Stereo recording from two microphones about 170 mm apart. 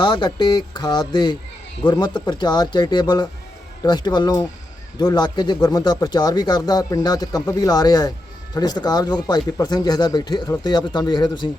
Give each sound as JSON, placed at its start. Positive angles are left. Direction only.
{"t": 0.0, "sound": "speech", "side_deg": 25}